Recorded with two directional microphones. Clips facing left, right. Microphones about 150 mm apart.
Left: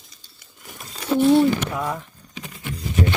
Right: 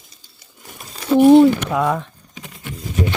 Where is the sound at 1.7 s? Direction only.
85° right.